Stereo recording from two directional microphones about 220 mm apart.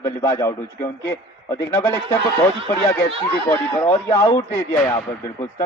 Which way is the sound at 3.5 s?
10° left (ahead or behind).